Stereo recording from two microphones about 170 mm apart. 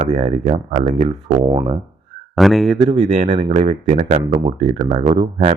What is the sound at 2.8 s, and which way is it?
Speech, 35° right (ahead or behind).